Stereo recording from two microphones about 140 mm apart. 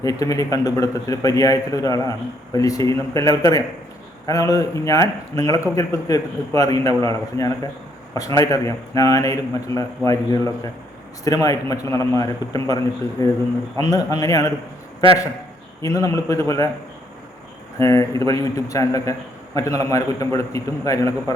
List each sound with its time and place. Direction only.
0.0 s a man's voice: 25° left (ahead or behind)
15.8 s a man's voice: 25° left (ahead or behind)
17.7 s a man's voice: 20° left (ahead or behind)